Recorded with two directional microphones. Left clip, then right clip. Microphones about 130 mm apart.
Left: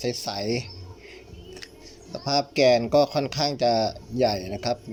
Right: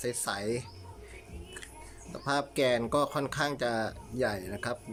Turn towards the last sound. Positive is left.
turn(degrees=10)  # may be behind; listen again after turning